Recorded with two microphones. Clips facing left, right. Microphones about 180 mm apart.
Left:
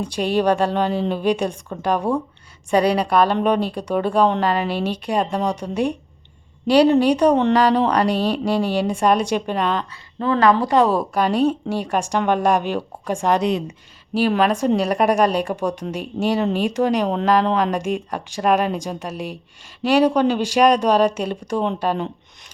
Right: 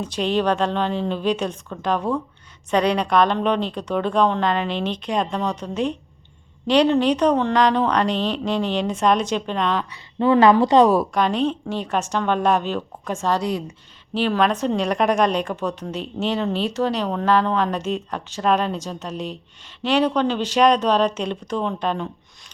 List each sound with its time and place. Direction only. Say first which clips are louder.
0.0 s a woman's voice: left 2 dB; 10° left (ahead or behind)
10.2 s speech: right 2 dB; 20° right (ahead or behind)
11.1 s a woman's voice: left 2 dB; 10° left (ahead or behind)
14.1 s a woman's voice: left 2 dB; 10° left (ahead or behind)